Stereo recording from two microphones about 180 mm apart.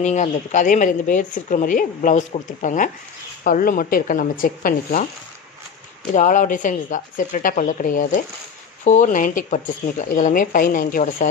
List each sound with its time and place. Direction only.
0.0 s speech: 40° left (ahead or behind)
6.1 s speech: 45° left (ahead or behind)